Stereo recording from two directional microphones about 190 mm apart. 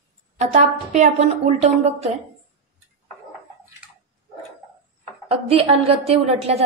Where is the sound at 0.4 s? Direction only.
40° right (ahead or behind).